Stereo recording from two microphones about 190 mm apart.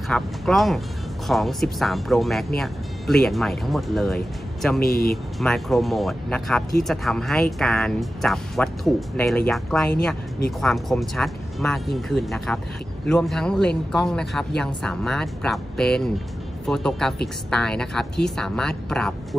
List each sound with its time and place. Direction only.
0.1 s speech: centre (ahead or behind)
4.8 s speech: 55° left (ahead or behind)
5.1 s speech: centre (ahead or behind)